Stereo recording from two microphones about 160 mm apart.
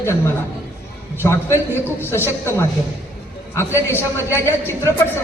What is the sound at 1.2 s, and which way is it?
A man's voice, 15° left (ahead or behind).